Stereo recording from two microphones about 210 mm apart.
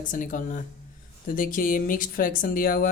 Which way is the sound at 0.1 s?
40° left (ahead or behind).